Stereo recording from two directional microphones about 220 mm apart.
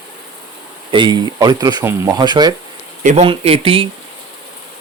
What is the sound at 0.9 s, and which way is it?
Speech, 20° right (ahead or behind).